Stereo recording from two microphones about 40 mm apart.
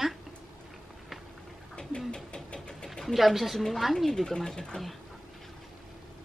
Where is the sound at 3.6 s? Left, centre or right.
Centre.